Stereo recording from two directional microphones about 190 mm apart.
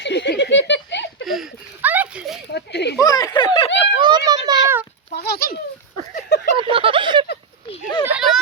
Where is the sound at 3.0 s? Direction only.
20° left (ahead or behind).